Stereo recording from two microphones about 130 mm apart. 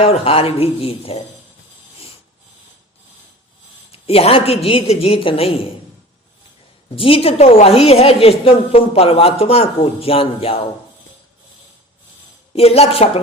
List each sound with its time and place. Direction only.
0.0 s a woman's voice: 50° left (ahead or behind)
3.9 s a woman's voice: 50° left (ahead or behind)
6.9 s a woman's voice: 45° left (ahead or behind)
12.5 s a woman's voice: 50° left (ahead or behind)